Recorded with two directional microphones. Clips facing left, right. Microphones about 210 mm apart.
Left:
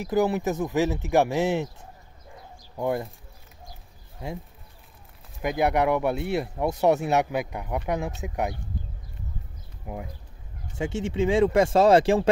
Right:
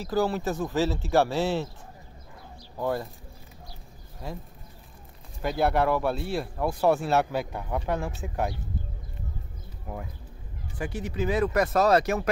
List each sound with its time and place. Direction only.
0.0 s speech: 20° left (ahead or behind)
2.8 s speech: 20° left (ahead or behind)
5.4 s speech: 15° left (ahead or behind)
9.9 s speech: 10° left (ahead or behind)
10.8 s speech: 25° left (ahead or behind)